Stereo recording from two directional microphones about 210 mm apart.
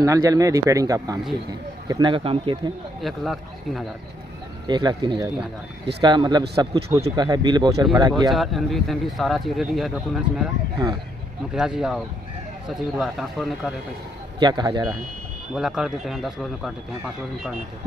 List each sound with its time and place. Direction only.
0.0 s speech: 15° right (ahead or behind)
3.0 s speech: centre (ahead or behind)
4.6 s speech: 20° right (ahead or behind)
8.3 s speech: centre (ahead or behind)
11.5 s speech: 5° right (ahead or behind)
14.4 s speech: 20° right (ahead or behind)
15.5 s speech: 5° right (ahead or behind)